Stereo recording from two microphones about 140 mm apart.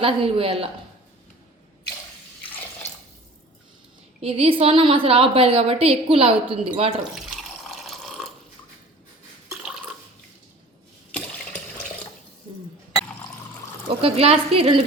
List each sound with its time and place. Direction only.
0.0 s a woman's voice: 40° right (ahead or behind)
4.2 s a woman's voice: 45° right (ahead or behind)
7.2 s water: centre (ahead or behind)
14.0 s a woman's voice: 45° right (ahead or behind)